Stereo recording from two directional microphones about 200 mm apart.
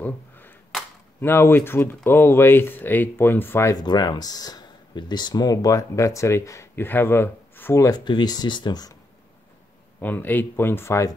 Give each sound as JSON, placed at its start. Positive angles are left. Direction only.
{"t": 0.0, "sound": "a sound", "side_deg": 10}
{"t": 2.0, "sound": "speech", "side_deg": 10}
{"t": 9.9, "sound": "speech", "side_deg": 10}